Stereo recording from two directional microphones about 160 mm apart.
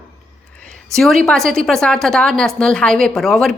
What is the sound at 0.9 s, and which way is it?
A woman's voice, centre (ahead or behind).